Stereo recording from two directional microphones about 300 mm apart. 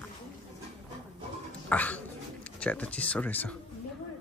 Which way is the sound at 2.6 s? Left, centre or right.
Centre.